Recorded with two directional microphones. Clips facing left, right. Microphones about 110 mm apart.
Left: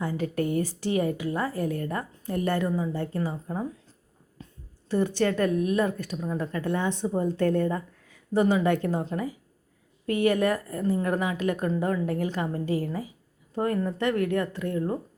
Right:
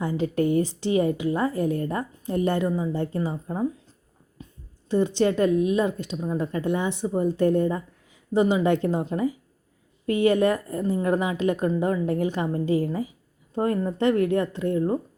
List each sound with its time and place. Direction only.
0.0 s a woman's voice: 25° right (ahead or behind)
4.4 s a sound: 15° right (ahead or behind)
4.9 s a woman's voice: 20° right (ahead or behind)